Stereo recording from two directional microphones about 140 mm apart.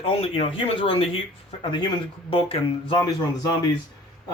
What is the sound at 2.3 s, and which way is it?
Speech, 40° left (ahead or behind).